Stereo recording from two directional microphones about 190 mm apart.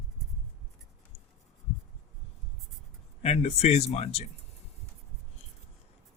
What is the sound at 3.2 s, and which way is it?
Speech, 35° left (ahead or behind).